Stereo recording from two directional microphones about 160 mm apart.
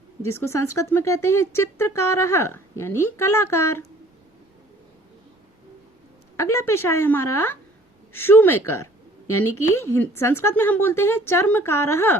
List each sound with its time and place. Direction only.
0.3 s speech: 15° left (ahead or behind)
6.3 s speech: 15° left (ahead or behind)